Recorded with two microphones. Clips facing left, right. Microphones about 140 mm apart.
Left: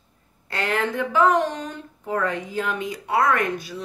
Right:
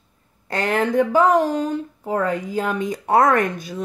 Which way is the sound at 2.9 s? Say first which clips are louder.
Right 6 dB; 50° right (ahead or behind).